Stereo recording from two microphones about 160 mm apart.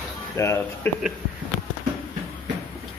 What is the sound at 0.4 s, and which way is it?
Speech, 20° left (ahead or behind).